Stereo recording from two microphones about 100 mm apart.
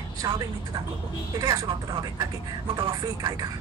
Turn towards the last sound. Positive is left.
turn(degrees=-40)  # may be behind; listen again after turning